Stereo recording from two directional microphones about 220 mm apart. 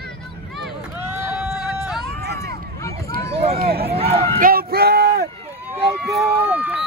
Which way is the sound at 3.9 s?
25° right (ahead or behind).